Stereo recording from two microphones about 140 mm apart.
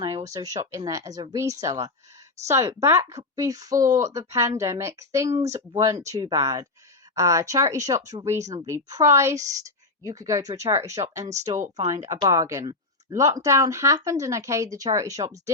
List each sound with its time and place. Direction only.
0.3 s speech: 25° right (ahead or behind)
11.5 s speech: 60° right (ahead or behind)
12.3 s speech: 20° right (ahead or behind)